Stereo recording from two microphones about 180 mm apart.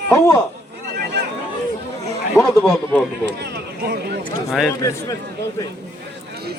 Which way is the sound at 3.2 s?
70° right (ahead or behind).